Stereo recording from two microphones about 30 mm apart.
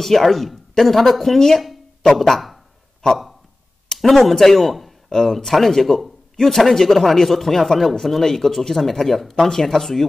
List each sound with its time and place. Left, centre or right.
0.0 s speech: centre
3.0 s speech: left
4.1 s speech: centre
5.1 s speech: centre